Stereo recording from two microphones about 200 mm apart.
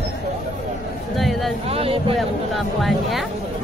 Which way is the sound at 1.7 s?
30° right (ahead or behind).